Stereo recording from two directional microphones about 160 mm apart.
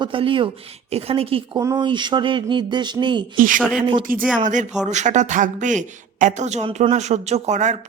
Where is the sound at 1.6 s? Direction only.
20° right (ahead or behind).